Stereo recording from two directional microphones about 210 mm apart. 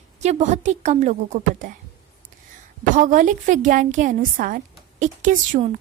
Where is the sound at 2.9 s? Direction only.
40° right (ahead or behind).